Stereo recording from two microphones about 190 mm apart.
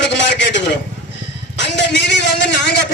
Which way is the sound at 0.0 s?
70° left (ahead or behind).